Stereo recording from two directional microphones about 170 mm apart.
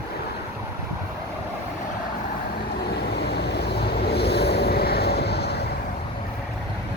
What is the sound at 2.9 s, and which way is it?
Vehicle, 75° left (ahead or behind).